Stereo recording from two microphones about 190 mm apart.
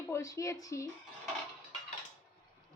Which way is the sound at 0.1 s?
15° left (ahead or behind).